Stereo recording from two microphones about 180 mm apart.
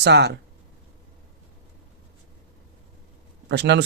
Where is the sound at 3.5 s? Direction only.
70° right (ahead or behind).